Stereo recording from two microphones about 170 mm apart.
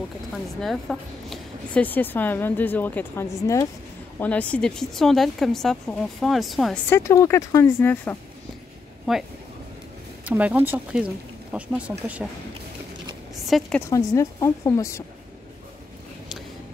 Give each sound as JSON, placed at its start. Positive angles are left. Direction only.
{"t": 0.3, "sound": "a woman's voice", "side_deg": 0}
{"t": 6.9, "sound": "a woman's voice", "side_deg": 15}
{"t": 9.1, "sound": "a woman's voice", "side_deg": 0}
{"t": 13.5, "sound": "a woman's voice", "side_deg": 0}
{"t": 13.7, "sound": "a woman's voice", "side_deg": 15}